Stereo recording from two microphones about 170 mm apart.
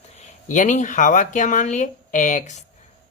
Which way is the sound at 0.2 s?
45° left (ahead or behind).